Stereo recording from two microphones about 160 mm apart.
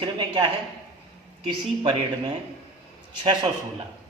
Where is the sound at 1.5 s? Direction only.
30° right (ahead or behind).